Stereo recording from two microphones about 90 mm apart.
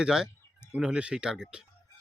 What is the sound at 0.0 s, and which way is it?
Speech, 5° right (ahead or behind).